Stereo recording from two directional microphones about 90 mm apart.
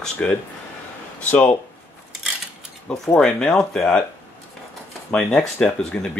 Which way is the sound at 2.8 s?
5° left (ahead or behind).